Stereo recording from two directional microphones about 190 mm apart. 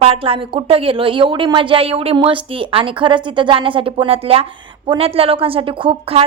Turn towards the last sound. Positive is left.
turn(degrees=-30)  # may be behind; listen again after turning